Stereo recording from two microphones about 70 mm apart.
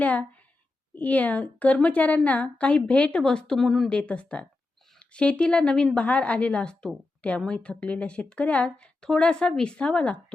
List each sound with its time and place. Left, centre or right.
0.0 s a woman's voice: left; by 3.8 s centre
3.8 s a woman's voice: centre